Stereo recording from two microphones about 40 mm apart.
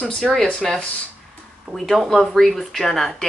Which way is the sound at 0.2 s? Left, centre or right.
Centre.